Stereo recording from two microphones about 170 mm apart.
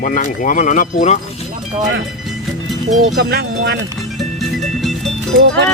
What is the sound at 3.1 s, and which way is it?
Speech, 75° right (ahead or behind).